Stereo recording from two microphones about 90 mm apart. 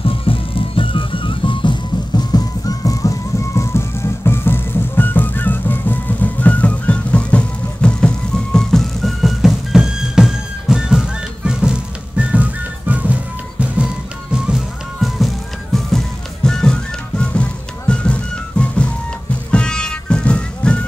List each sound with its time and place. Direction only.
0.0 s music: 90° left; by 13.8 s 15° right (ahead or behind)
14.3 s music: 5° right (ahead or behind); by 20.8 s 10° left (ahead or behind)